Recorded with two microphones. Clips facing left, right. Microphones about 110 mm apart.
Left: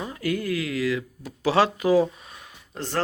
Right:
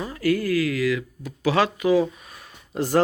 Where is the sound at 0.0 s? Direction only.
20° left (ahead or behind); by 2.0 s 35° left (ahead or behind).